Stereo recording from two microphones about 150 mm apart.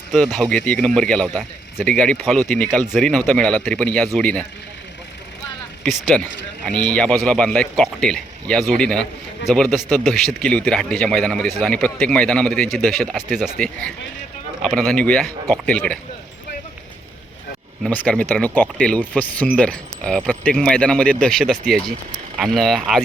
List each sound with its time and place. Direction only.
0.1 s speech: 5° right (ahead or behind)
5.8 s speech: centre (ahead or behind)
17.9 s speech: 10° left (ahead or behind)